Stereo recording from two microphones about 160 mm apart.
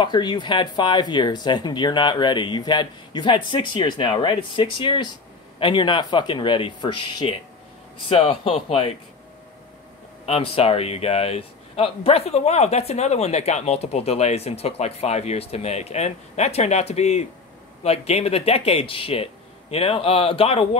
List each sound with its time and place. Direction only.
0.0 s speech: 30° left (ahead or behind)
10.2 s speech: 40° left (ahead or behind)